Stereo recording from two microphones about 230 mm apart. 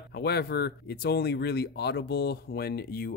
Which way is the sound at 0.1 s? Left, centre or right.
Left.